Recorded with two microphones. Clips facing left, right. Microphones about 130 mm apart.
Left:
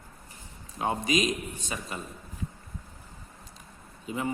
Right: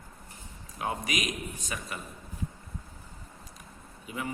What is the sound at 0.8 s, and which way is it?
A man's voice, 25° left (ahead or behind).